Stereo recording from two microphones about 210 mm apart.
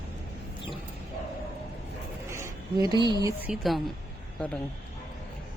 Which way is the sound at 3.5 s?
Centre (ahead or behind).